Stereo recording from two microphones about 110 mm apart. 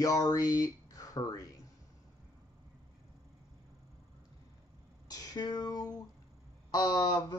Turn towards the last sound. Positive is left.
turn(degrees=40)  # may be behind; listen again after turning